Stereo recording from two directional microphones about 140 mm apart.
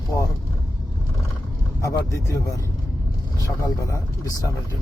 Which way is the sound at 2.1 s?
20° left (ahead or behind).